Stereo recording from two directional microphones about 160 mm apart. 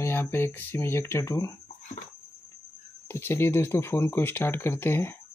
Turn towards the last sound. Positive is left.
turn(degrees=15)  # may be behind; listen again after turning